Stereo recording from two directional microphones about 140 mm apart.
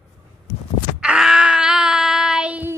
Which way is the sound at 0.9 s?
5° right (ahead or behind).